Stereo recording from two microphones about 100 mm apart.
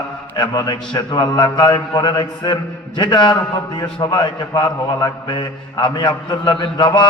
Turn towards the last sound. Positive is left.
turn(degrees=55)  # may be behind; listen again after turning